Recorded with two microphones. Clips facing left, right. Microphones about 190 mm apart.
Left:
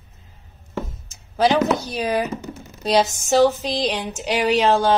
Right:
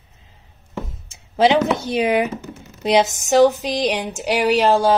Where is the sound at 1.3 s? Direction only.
25° right (ahead or behind).